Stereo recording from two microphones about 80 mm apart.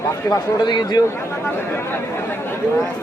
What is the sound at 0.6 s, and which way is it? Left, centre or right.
Speech, left.